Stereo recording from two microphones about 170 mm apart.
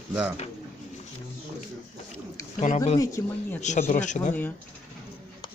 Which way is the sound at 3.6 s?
45° left (ahead or behind).